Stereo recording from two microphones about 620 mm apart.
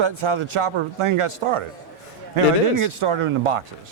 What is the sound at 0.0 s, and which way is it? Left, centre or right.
Speech, right.